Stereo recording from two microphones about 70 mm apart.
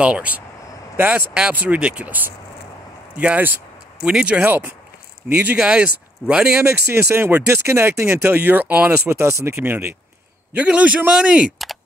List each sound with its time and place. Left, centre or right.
0.0 s speech: centre
4.4 s speech: right; by 6.6 s centre
6.6 s speech: right
9.1 s speech: right
10.5 s speech: right
11.5 s a sound: centre